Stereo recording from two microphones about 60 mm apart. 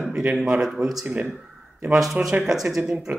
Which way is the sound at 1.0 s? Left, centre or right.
Right.